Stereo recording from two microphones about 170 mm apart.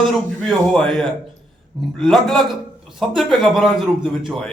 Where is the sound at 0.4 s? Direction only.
5° left (ahead or behind).